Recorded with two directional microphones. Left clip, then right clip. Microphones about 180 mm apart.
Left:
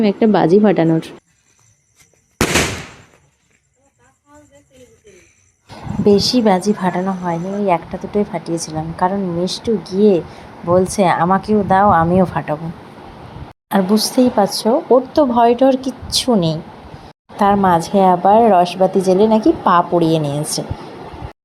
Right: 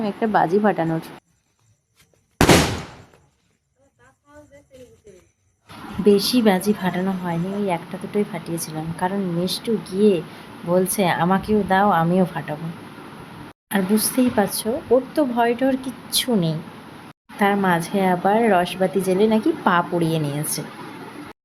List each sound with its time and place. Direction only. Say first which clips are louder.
0.0 s a woman's voice: left 6 dB; 20° left (ahead or behind)
6.1 s a woman's voice: left 4 dB; 15° left (ahead or behind)
13.7 s a woman's voice: left 6 dB; 20° left (ahead or behind)